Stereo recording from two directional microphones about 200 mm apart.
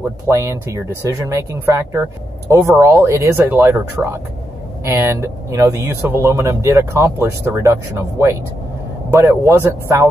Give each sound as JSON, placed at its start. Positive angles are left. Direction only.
{"t": 0.3, "sound": "speech", "side_deg": -15}